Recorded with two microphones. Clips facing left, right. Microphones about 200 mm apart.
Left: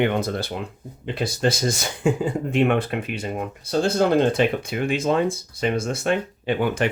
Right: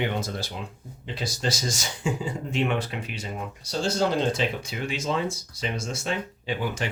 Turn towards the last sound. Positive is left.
turn(degrees=60)  # may be behind; listen again after turning